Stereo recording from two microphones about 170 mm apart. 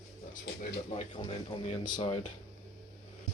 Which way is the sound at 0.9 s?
35° left (ahead or behind).